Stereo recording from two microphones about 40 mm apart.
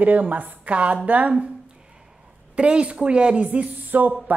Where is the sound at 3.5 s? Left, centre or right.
Right.